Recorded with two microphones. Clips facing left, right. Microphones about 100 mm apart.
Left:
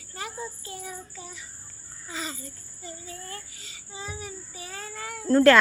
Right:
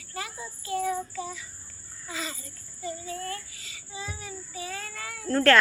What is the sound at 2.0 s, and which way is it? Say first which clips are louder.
A child's voice: even; 25° left (ahead or behind).